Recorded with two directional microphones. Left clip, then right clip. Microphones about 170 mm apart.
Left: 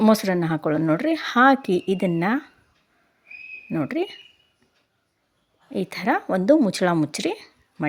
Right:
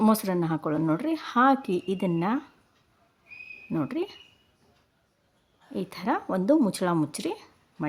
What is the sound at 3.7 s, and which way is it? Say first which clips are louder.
Speech: left 5 dB; 15° left (ahead or behind).